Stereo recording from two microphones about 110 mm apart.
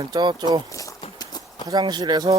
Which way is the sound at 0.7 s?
30° left (ahead or behind).